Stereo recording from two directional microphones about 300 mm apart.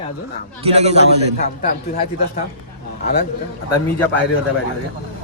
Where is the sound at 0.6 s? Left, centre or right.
Right.